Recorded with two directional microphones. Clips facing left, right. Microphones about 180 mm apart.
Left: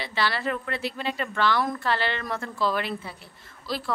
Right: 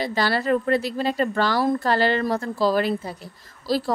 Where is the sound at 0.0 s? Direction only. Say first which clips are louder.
Right 5 dB; 40° right (ahead or behind).